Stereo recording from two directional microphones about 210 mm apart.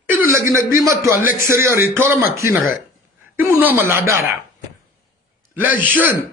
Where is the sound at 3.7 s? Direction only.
15° right (ahead or behind).